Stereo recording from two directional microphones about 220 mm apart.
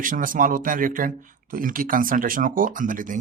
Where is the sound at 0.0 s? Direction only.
40° right (ahead or behind).